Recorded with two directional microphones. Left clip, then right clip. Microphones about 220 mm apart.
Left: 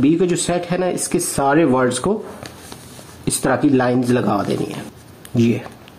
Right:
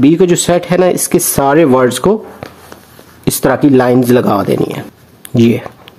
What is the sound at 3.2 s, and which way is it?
Speech, 40° right (ahead or behind).